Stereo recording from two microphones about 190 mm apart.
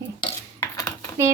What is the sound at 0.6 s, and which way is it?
Cutlery, 15° left (ahead or behind).